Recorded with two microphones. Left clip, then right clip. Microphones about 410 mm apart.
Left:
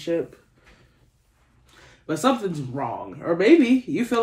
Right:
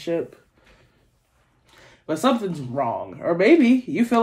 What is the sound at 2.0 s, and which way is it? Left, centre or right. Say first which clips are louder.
Speech: right 1 dB; right.